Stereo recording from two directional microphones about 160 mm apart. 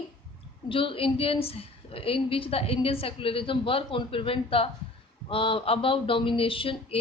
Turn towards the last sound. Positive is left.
turn(degrees=35)  # may be behind; listen again after turning